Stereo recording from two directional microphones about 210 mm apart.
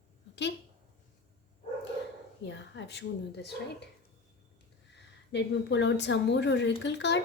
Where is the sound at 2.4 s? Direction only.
55° left (ahead or behind).